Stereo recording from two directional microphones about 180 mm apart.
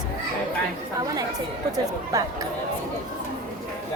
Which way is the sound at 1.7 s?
20° right (ahead or behind).